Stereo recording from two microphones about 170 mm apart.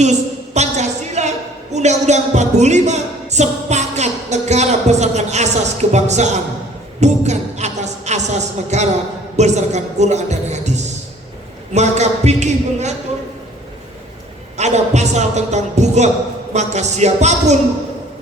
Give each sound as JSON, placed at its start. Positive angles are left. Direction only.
{"t": 0.5, "sound": "a woman's voice", "side_deg": -40}
{"t": 14.5, "sound": "a woman's voice", "side_deg": -40}